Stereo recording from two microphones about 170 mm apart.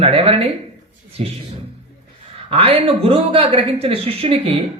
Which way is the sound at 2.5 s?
35° right (ahead or behind).